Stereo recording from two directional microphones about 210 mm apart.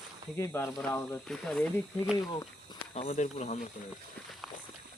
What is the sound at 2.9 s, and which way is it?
Speech, 30° left (ahead or behind).